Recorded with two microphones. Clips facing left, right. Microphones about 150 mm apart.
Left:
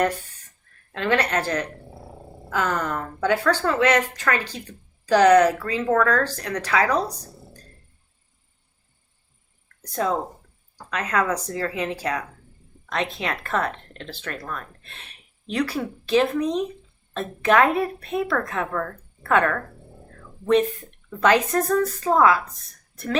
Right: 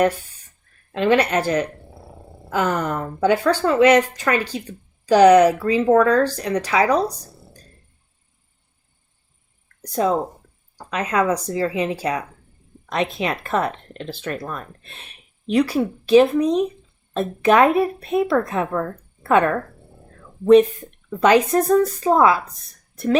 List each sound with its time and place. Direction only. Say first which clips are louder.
0.9 s speech: right 5 dB; 15° right (ahead or behind)
9.8 s speech: right 4 dB; 15° right (ahead or behind)